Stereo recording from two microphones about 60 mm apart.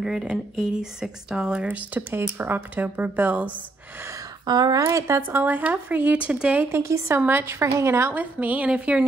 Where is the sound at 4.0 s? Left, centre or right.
Right.